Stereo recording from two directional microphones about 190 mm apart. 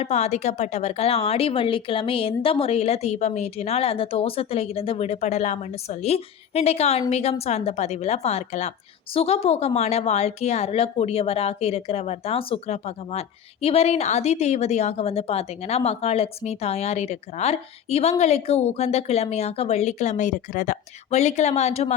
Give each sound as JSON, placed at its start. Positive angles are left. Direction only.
{"t": 0.0, "sound": "a woman's voice", "side_deg": 35}